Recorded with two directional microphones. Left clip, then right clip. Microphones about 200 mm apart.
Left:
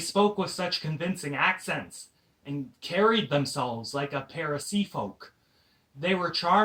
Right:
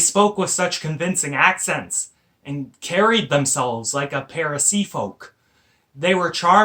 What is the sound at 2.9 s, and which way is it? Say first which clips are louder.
Speech: right 7 dB; 25° right (ahead or behind).